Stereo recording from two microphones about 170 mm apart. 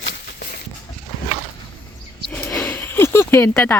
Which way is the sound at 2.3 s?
15° left (ahead or behind).